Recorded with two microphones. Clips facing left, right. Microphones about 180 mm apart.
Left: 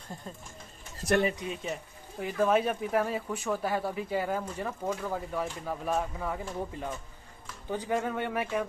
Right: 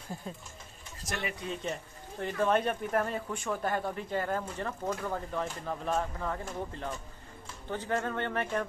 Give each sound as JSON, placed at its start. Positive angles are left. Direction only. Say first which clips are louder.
{"t": 1.0, "sound": "speech", "louder": "left 12 dB", "side_deg": 60}
{"t": 1.6, "sound": "speech", "louder": "even", "side_deg": 5}